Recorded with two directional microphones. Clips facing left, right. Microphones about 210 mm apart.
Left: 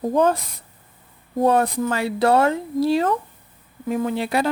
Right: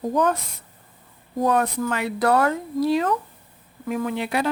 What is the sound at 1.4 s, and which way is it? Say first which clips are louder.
Speech: left 3 dB; 30° left (ahead or behind).